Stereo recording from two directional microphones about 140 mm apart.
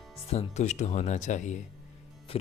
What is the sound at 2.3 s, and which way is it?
Speech, 45° left (ahead or behind).